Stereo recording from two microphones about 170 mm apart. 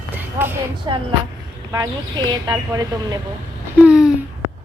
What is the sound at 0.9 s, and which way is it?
Speech, 25° right (ahead or behind).